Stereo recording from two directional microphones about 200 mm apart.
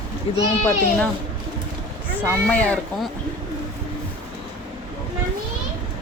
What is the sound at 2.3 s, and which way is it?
Speech, 5° left (ahead or behind).